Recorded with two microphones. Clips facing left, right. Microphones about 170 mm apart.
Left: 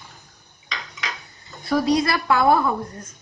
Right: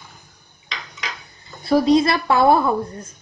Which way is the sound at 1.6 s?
25° right (ahead or behind).